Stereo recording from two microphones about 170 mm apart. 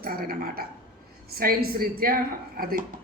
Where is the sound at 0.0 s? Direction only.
60° right (ahead or behind).